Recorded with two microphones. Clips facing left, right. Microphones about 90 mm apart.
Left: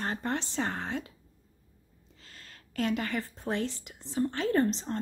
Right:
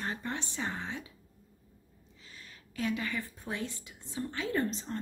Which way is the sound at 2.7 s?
60° left (ahead or behind).